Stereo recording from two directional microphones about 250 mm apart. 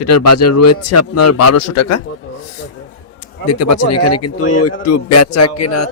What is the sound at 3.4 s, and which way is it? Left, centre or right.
A man's voice, left.